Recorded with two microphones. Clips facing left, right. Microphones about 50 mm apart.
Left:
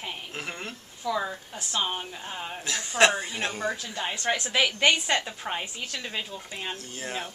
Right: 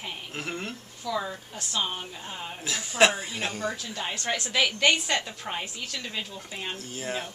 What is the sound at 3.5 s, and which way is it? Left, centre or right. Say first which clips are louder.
A woman's voice: left 1 dB; centre.